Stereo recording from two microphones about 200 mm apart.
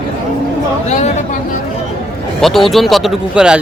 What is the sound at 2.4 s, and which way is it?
A man's voice, centre (ahead or behind).